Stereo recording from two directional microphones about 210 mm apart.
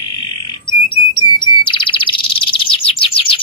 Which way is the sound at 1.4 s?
25° left (ahead or behind).